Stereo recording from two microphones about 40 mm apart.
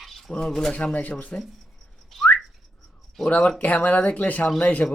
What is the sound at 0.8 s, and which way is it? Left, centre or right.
Speech, left.